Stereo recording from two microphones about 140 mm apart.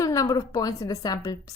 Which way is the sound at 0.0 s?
25° left (ahead or behind).